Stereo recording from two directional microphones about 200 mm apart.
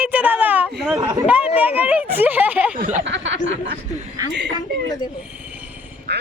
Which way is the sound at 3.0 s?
60° right (ahead or behind).